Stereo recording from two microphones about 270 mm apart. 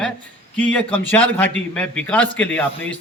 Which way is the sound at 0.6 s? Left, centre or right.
Centre.